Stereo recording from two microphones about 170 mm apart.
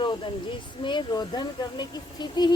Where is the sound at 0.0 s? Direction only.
30° left (ahead or behind).